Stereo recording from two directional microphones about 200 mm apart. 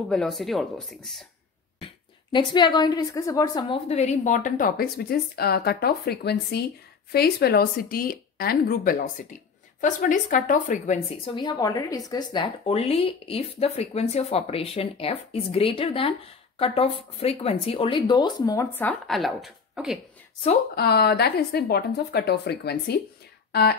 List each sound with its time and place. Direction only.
0.1 s speech: centre (ahead or behind)
2.3 s a woman's voice: 20° left (ahead or behind); by 11.0 s 40° left (ahead or behind)
11.2 s a woman's voice: 20° left (ahead or behind); by 20.0 s 5° right (ahead or behind)
20.7 s speech: 55° left (ahead or behind)
23.5 s a sound: 50° left (ahead or behind)